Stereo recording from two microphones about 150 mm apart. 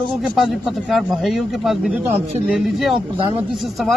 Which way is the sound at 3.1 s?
35° right (ahead or behind).